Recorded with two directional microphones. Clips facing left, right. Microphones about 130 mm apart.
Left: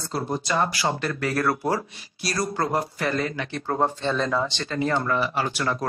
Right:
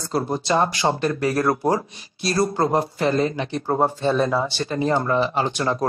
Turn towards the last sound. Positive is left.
turn(degrees=-25)  # may be behind; listen again after turning